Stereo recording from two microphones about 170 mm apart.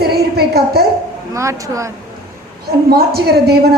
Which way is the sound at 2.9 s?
65° right (ahead or behind).